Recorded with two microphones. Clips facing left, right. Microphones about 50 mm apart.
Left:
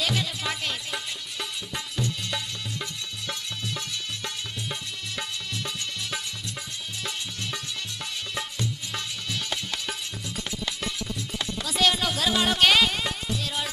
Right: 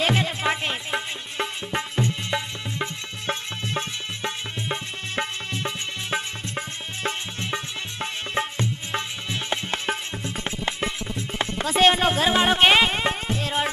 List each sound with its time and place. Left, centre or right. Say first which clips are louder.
0.0 s music: right 6 dB; right